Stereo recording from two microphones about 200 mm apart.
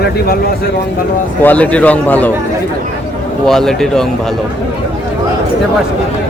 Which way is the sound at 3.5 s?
Centre (ahead or behind).